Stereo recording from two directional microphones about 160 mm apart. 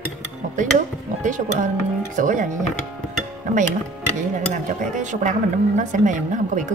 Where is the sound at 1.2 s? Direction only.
50° right (ahead or behind).